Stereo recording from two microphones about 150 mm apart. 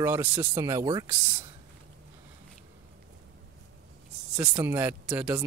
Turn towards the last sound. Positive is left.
turn(degrees=-5)  # may be behind; listen again after turning